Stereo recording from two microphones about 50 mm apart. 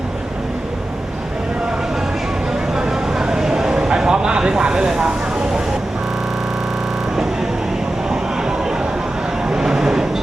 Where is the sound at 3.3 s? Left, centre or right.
Centre.